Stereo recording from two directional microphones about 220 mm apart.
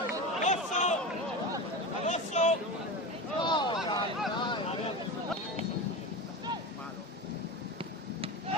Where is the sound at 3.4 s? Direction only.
20° left (ahead or behind).